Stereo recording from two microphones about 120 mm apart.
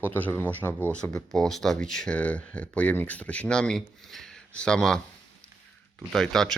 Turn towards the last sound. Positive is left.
turn(degrees=5)  # may be behind; listen again after turning